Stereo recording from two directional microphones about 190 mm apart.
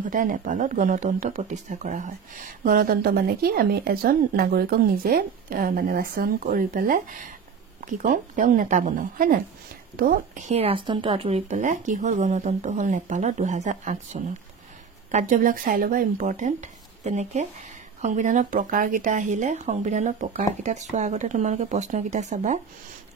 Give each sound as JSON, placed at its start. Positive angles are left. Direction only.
{"t": 0.0, "sound": "speech", "side_deg": -45}